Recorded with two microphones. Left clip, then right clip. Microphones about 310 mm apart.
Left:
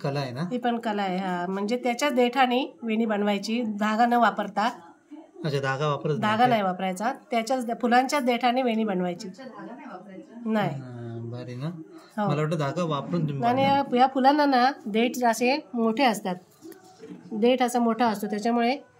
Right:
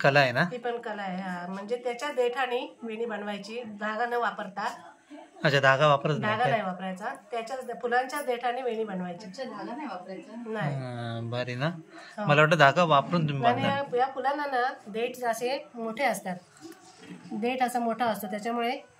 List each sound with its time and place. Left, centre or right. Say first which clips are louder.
0.0 s a man's voice: right 9 dB; centre
0.5 s a woman's voice: left 5 dB; left
5.4 s a man's voice: right 6 dB; centre
6.2 s a woman's voice: left 4 dB; left
10.9 s speech: right 4 dB; right
12.3 s a man's voice: right 10 dB; centre
13.5 s a woman's voice: left 4 dB; left
17.4 s a woman's voice: left 5 dB; left